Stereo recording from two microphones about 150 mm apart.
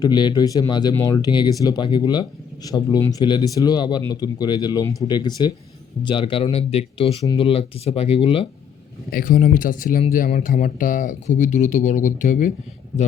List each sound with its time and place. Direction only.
0.0 s speech: 30° left (ahead or behind)
9.0 s speech: 70° left (ahead or behind)